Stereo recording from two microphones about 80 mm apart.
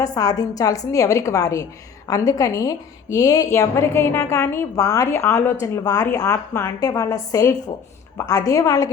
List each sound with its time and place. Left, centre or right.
0.0 s a woman's voice: left
5.1 s a woman's voice: left
5.8 s a woman's voice: left
6.1 s a woman's voice: left